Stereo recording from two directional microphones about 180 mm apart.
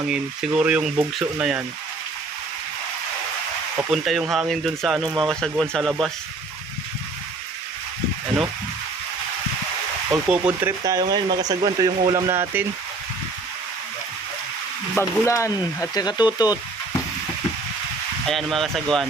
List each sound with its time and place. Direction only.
0.6 s speech: 5° right (ahead or behind)
3.9 s speech: centre (ahead or behind)
10.1 s speech: 10° right (ahead or behind)
14.9 s speech: 15° left (ahead or behind)
18.3 s speech: centre (ahead or behind)